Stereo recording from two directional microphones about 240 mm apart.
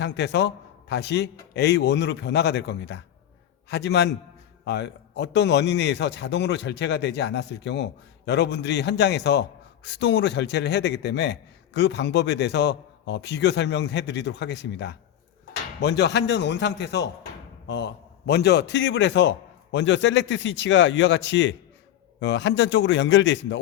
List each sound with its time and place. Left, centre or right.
0.0 s a man's voice: left